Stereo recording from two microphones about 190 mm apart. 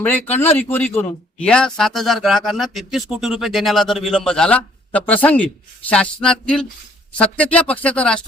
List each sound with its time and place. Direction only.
0.0 s speech: 10° left (ahead or behind)